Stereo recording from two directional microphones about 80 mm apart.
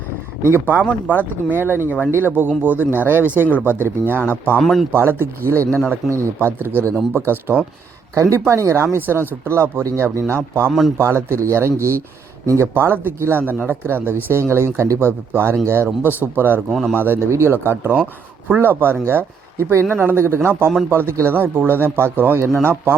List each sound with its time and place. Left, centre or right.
1.5 s speech: right
4.6 s speech: centre
4.9 s speech: right
8.1 s speech: right
10.7 s speech: centre
10.9 s speech: right
16.6 s speech: centre
16.9 s speech: right